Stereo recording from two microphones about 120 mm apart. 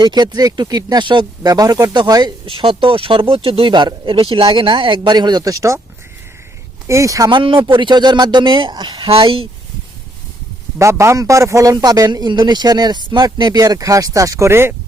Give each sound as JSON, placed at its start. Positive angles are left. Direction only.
{"t": 0.0, "sound": "a man's voice", "side_deg": -35}
{"t": 2.5, "sound": "speech", "side_deg": -45}
{"t": 6.8, "sound": "speech", "side_deg": -25}
{"t": 7.3, "sound": "a man's voice", "side_deg": -45}
{"t": 9.0, "sound": "speech", "side_deg": -50}
{"t": 10.8, "sound": "a man's voice", "side_deg": -25}